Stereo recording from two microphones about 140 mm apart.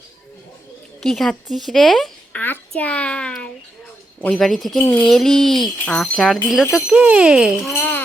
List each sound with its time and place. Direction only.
1.0 s a child's voice: centre (ahead or behind)
4.8 s a sound: 20° left (ahead or behind)
5.0 s speech: 5° left (ahead or behind)
7.8 s music: 10° left (ahead or behind)